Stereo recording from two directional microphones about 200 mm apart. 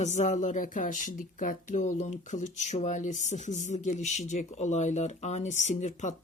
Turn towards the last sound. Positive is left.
turn(degrees=35)  # may be behind; listen again after turning